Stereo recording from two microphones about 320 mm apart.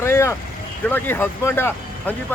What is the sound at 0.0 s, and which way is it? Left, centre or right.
Vehicle, centre.